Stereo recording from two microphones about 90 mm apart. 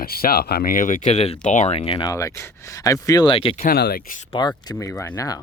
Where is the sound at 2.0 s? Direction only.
35° left (ahead or behind).